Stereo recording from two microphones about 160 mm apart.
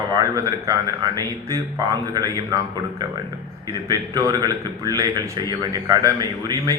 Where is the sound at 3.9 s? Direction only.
25° right (ahead or behind).